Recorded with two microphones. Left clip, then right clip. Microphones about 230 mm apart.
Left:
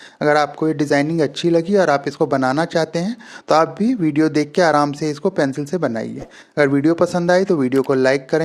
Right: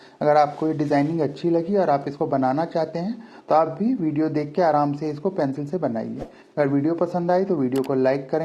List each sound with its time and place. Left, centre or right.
0.2 s a man's voice: left